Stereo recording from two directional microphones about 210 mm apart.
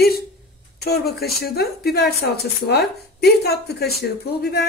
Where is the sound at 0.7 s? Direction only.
50° left (ahead or behind).